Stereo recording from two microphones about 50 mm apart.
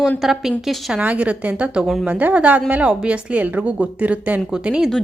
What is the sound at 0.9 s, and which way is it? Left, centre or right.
A woman's voice, right.